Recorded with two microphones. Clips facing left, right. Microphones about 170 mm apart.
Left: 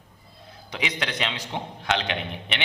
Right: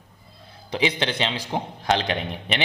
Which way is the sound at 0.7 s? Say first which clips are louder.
Right 6 dB; 30° right (ahead or behind).